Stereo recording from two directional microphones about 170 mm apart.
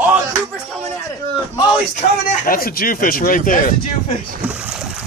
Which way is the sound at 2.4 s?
60° left (ahead or behind).